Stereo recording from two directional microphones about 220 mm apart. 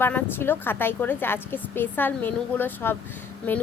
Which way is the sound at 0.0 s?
10° left (ahead or behind).